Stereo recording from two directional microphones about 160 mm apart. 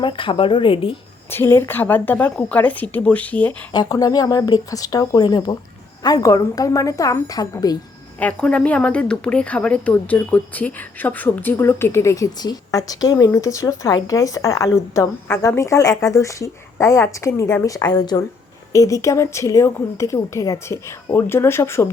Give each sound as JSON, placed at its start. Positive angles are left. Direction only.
{"t": 0.0, "sound": "speech", "side_deg": 30}
{"t": 1.3, "sound": "speech", "side_deg": 15}
{"t": 3.7, "sound": "speech", "side_deg": 25}
{"t": 8.2, "sound": "speech", "side_deg": 10}